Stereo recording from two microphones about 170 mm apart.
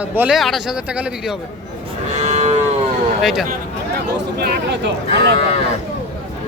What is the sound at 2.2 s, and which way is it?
Livestock, 40° right (ahead or behind).